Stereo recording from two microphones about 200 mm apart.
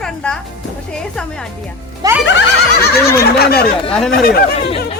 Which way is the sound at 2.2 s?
65° left (ahead or behind).